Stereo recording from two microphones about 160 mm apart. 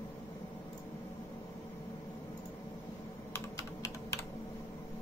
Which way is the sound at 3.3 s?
20° left (ahead or behind).